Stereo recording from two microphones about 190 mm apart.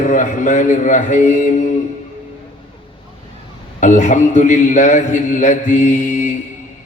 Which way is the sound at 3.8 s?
40° left (ahead or behind).